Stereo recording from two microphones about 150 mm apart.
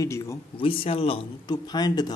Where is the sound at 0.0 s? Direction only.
20° left (ahead or behind).